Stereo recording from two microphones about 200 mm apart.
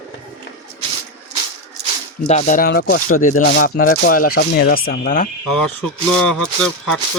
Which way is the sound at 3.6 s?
50° left (ahead or behind).